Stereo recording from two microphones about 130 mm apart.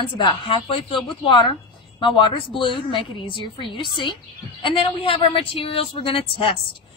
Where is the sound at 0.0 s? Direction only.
40° left (ahead or behind).